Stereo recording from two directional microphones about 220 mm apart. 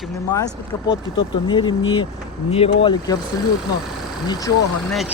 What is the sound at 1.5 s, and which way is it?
Speech, 20° left (ahead or behind).